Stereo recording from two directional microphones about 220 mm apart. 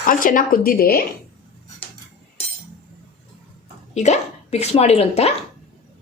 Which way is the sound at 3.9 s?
30° left (ahead or behind).